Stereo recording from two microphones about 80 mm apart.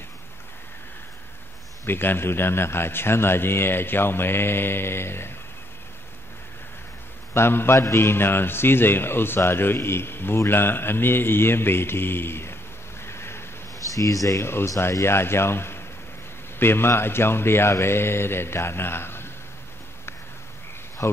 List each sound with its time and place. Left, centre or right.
1.9 s a man's voice: left
7.3 s a man's voice: left
13.0 s a sound: left
13.7 s a man's voice: left
21.0 s speech: left